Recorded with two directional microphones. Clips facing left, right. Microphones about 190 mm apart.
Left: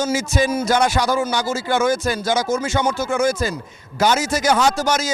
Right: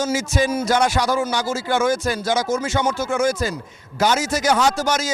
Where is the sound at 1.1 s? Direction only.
30° left (ahead or behind).